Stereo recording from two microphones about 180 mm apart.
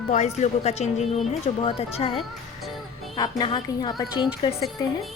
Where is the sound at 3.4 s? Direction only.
25° left (ahead or behind).